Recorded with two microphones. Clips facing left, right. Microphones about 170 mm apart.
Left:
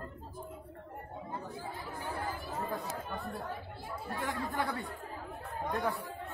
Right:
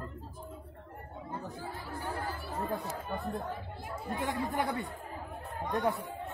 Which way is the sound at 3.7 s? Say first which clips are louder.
Right 2 dB; 20° right (ahead or behind).